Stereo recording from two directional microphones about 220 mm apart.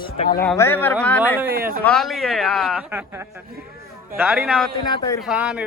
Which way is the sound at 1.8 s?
Centre (ahead or behind).